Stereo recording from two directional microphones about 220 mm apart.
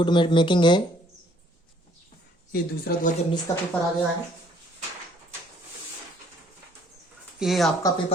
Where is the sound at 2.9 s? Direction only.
45° left (ahead or behind).